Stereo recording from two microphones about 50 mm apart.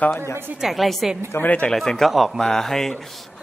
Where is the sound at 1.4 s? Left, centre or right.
Left.